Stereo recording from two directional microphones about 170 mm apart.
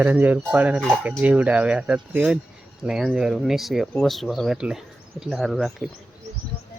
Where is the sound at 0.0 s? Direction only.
10° right (ahead or behind).